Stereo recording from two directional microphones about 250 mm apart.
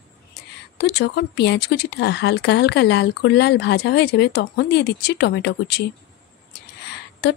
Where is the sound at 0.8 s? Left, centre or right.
Left.